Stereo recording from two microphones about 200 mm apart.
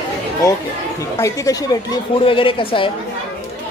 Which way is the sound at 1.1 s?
15° left (ahead or behind).